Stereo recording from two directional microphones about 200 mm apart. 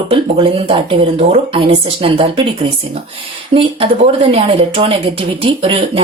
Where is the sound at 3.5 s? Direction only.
30° right (ahead or behind).